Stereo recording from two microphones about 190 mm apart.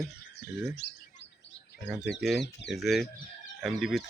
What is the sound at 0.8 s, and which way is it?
Speech, 60° left (ahead or behind).